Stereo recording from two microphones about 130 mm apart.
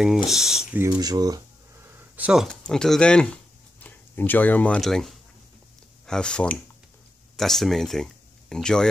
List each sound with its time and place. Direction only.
0.0 s speech: centre (ahead or behind)
0.7 s a sound: 30° right (ahead or behind); by 2.4 s 10° right (ahead or behind)
2.4 s speech: 5° left (ahead or behind)
4.8 s speech: centre (ahead or behind)